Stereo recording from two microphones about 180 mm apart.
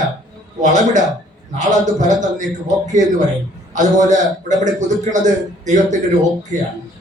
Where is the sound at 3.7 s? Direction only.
45° right (ahead or behind).